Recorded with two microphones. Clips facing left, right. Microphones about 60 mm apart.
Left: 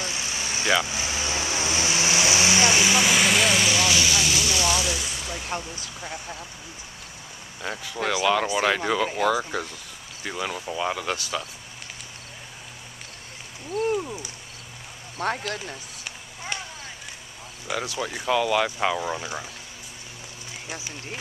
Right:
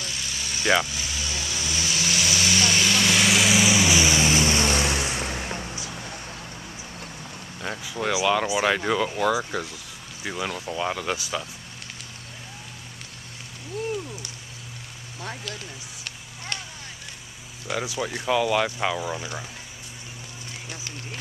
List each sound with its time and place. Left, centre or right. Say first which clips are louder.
0.0 s vehicle: left 3 dB; left; by 5.5 s right
7.6 s speech: even; centre
13.9 s a sound: left 4 dB; left
15.1 s speech: left 8 dB; left
15.6 s a sound: left 2 dB; centre
17.8 s speech: even; centre